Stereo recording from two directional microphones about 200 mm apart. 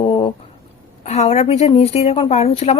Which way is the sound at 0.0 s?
25° left (ahead or behind).